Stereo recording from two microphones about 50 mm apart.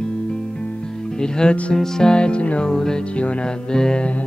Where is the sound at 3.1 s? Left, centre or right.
Left.